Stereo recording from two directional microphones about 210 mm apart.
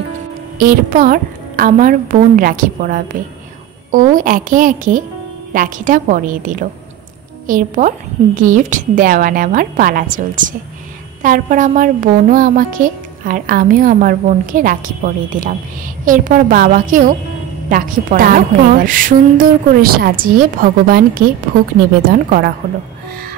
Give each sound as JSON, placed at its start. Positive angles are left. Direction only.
{"t": 0.6, "sound": "a woman's voice", "side_deg": -40}
{"t": 22.6, "sound": "a woman's voice", "side_deg": -45}